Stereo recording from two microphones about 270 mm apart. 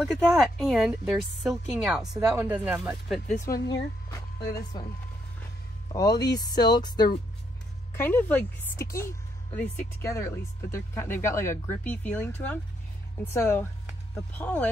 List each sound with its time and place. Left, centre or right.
0.0 s speech: centre
5.9 s speech: centre